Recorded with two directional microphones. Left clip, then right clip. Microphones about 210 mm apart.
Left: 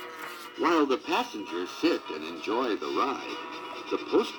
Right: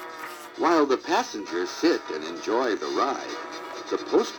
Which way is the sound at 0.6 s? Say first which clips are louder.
Right 4 dB; 30° right (ahead or behind).